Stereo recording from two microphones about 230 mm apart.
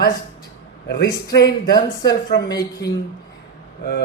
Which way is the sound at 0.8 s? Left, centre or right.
Left.